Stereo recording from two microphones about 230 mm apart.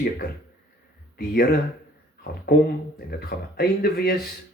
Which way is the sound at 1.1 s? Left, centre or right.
Left.